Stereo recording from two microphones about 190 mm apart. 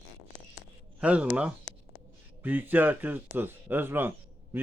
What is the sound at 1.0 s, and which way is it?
Speech, 5° right (ahead or behind).